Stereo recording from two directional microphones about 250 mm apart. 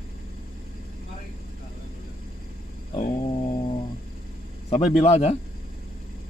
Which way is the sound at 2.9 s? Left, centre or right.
Left.